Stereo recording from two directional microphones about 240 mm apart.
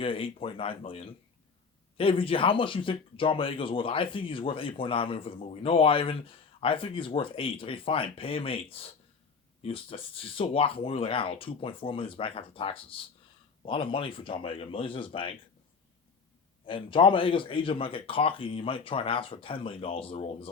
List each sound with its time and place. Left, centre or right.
0.0 s speech: left
16.6 s speech: left